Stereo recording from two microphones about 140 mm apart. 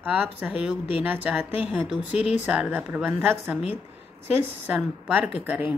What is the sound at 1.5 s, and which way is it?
Speech, 40° left (ahead or behind).